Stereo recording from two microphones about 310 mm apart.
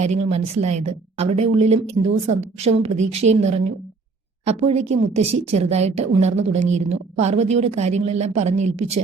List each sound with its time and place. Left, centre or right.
0.0 s a woman's voice: right